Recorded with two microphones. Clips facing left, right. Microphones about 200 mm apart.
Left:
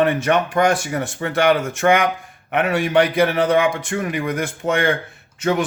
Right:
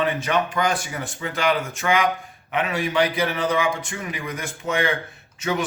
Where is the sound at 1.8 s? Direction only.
45° left (ahead or behind).